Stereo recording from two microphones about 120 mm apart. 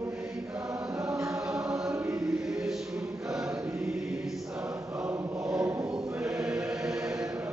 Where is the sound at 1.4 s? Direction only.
5° right (ahead or behind).